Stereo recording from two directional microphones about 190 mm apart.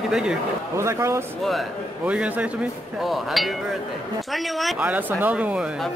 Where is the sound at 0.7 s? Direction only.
15° right (ahead or behind).